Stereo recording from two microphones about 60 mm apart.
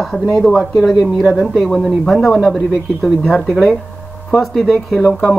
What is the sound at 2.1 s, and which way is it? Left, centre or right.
Speech, centre.